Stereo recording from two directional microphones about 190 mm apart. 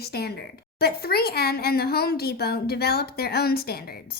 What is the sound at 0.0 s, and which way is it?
A woman's voice, 55° left (ahead or behind).